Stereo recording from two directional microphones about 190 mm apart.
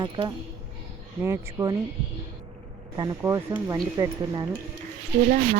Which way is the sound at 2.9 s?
20° right (ahead or behind).